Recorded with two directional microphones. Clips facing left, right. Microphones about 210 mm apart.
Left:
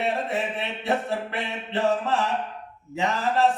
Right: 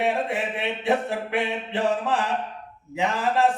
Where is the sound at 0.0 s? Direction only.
15° right (ahead or behind).